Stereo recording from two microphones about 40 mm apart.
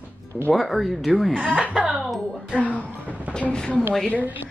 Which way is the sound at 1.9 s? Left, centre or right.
Centre.